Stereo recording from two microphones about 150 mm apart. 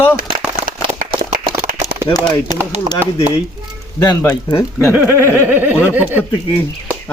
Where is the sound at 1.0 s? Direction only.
65° right (ahead or behind).